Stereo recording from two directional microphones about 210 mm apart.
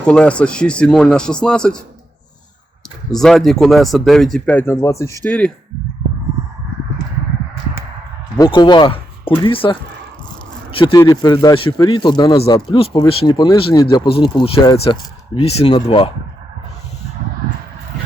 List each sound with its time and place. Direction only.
0.0 s speech: 5° left (ahead or behind)
3.1 s speech: centre (ahead or behind)
8.4 s speech: 20° left (ahead or behind)
10.8 s speech: 20° left (ahead or behind)